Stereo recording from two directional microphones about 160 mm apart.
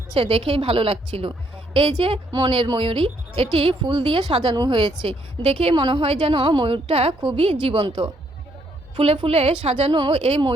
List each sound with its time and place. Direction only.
0.1 s speech: 35° right (ahead or behind)